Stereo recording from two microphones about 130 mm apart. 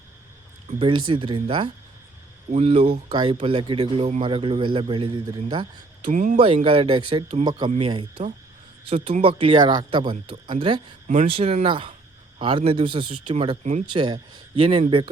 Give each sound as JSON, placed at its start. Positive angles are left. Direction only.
{"t": 0.8, "sound": "speech", "side_deg": -40}
{"t": 2.5, "sound": "speech", "side_deg": -50}
{"t": 6.1, "sound": "speech", "side_deg": -75}
{"t": 6.3, "sound": "speech", "side_deg": -45}